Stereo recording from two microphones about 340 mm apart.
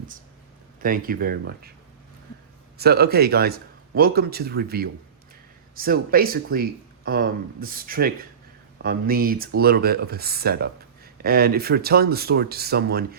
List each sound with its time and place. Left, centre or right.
0.8 s speech: right
2.7 s speech: right